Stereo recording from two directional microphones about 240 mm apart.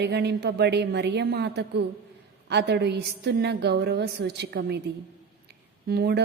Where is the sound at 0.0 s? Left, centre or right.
Right.